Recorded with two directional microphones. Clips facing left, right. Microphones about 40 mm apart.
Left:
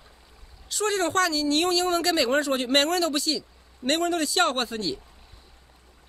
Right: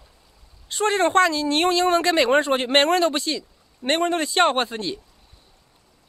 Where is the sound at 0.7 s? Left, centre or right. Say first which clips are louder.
Right 5 dB; right.